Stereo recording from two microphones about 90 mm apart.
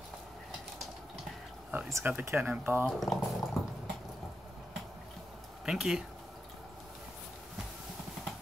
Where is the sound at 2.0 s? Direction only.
20° right (ahead or behind).